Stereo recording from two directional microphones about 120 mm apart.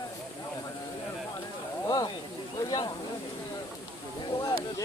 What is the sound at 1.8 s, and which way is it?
Speech, 35° left (ahead or behind).